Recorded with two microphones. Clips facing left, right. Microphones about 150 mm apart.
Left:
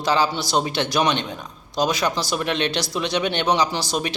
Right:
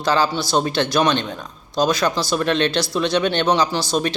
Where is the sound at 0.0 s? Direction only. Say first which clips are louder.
Right 2 dB; 15° left (ahead or behind).